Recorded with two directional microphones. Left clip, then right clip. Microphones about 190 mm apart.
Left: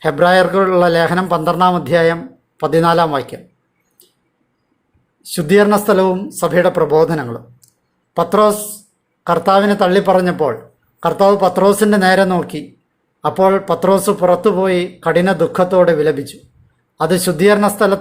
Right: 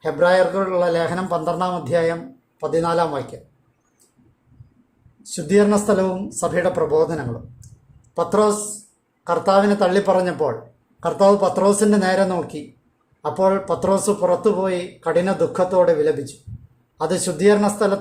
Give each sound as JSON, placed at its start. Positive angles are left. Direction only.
{"t": 0.0, "sound": "speech", "side_deg": 25}
{"t": 5.2, "sound": "speech", "side_deg": 25}